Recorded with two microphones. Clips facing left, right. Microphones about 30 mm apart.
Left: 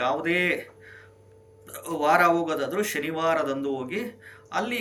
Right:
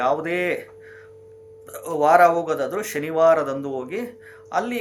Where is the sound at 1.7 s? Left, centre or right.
Left.